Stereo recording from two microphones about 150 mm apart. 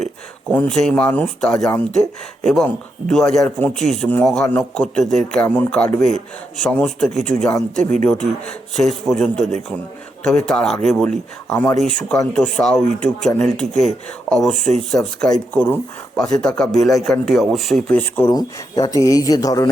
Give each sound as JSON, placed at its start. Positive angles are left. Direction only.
{"t": 0.5, "sound": "speech", "side_deg": 10}
{"t": 18.3, "sound": "speech", "side_deg": 25}